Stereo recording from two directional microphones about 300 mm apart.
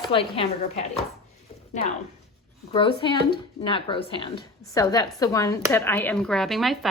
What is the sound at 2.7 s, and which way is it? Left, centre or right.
A woman's voice, centre.